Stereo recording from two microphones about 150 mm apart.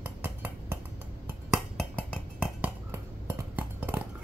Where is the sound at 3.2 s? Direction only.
10° right (ahead or behind).